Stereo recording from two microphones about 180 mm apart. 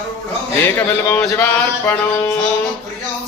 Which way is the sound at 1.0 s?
10° left (ahead or behind).